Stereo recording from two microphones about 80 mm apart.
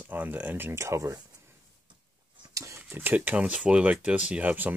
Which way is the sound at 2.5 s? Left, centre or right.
Right.